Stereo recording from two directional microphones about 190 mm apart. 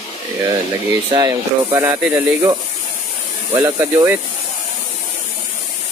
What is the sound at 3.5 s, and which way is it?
Speech, 15° right (ahead or behind).